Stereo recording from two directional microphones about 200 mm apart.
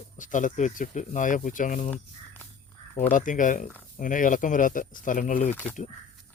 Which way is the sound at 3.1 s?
40° left (ahead or behind).